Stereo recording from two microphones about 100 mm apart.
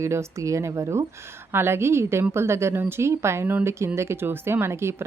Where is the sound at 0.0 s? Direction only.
30° right (ahead or behind).